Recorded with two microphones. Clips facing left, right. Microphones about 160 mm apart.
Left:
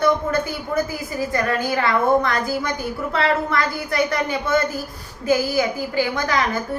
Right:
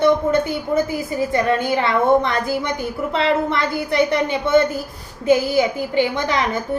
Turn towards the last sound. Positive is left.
turn(degrees=-25)  # may be behind; listen again after turning